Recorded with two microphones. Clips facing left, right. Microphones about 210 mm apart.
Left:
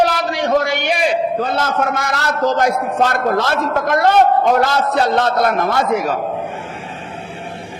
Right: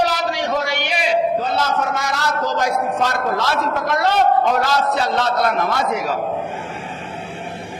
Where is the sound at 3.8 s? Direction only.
50° left (ahead or behind).